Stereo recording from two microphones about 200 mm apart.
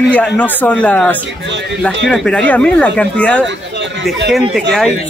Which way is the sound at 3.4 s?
65° right (ahead or behind).